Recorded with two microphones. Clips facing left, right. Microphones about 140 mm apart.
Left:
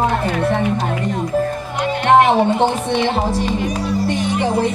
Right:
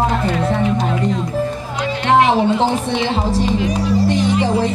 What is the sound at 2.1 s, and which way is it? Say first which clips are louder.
Speech: left 1 dB; 50° left (ahead or behind).